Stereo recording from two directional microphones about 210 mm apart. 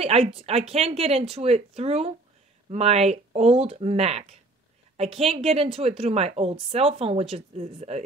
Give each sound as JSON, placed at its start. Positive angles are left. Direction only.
{"t": 0.4, "sound": "speech", "side_deg": -30}